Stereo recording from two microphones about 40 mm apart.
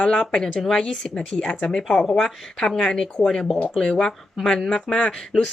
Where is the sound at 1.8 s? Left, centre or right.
Centre.